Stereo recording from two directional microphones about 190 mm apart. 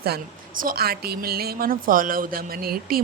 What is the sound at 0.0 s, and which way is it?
A woman's voice, 50° right (ahead or behind).